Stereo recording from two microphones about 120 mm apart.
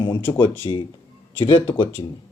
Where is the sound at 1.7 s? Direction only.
40° left (ahead or behind).